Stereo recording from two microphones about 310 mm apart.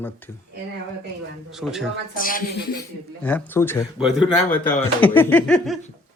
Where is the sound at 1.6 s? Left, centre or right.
Centre.